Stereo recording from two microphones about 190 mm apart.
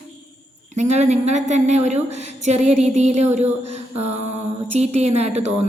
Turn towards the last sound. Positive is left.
turn(degrees=-35)  # may be behind; listen again after turning